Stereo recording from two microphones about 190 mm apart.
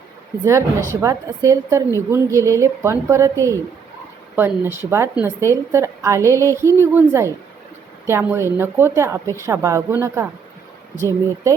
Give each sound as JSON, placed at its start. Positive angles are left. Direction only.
{"t": 0.4, "sound": "a woman's voice", "side_deg": -15}